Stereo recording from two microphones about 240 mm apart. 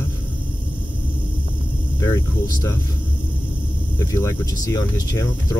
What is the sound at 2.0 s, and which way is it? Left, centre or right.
Speech, centre.